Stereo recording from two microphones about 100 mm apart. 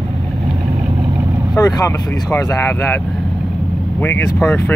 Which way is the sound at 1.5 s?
35° left (ahead or behind).